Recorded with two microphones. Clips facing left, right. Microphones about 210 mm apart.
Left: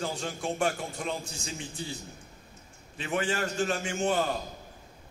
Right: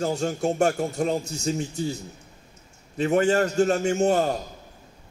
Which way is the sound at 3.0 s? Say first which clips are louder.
Right 10 dB; 40° right (ahead or behind).